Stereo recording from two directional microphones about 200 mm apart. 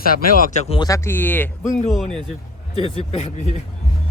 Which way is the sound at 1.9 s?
Centre (ahead or behind).